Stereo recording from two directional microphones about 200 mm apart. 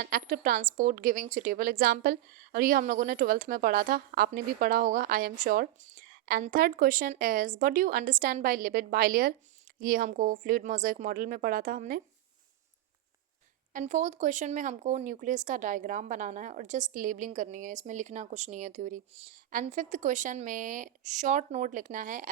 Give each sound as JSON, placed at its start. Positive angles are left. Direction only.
{"t": 0.0, "sound": "a woman's voice", "side_deg": -45}
{"t": 13.7, "sound": "speech", "side_deg": -35}